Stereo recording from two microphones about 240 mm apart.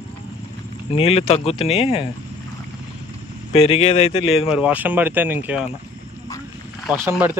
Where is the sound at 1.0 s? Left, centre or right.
Left.